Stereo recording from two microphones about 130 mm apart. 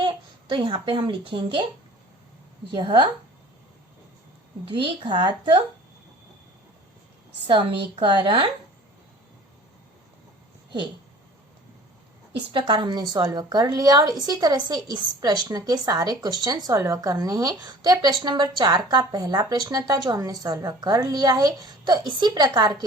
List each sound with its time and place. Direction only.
0.0 s a child's voice: 40° right (ahead or behind)
2.7 s a woman's voice: 35° right (ahead or behind)
4.6 s a woman's voice: 40° right (ahead or behind)
7.4 s a woman's voice: 40° right (ahead or behind)
12.3 s a woman's voice: 40° right (ahead or behind)